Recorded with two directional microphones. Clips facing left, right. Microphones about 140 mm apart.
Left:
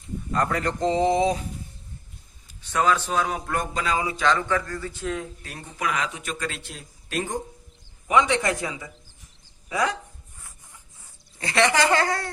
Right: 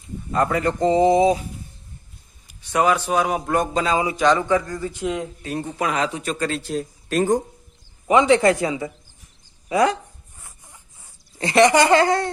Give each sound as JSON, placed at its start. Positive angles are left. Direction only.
{"t": 0.3, "sound": "speech", "side_deg": -5}
{"t": 2.5, "sound": "a man's voice", "side_deg": -15}
{"t": 8.0, "sound": "a man's voice", "side_deg": -30}
{"t": 11.3, "sound": "a man's voice", "side_deg": -20}